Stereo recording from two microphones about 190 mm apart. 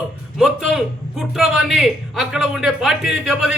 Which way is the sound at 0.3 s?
Centre (ahead or behind).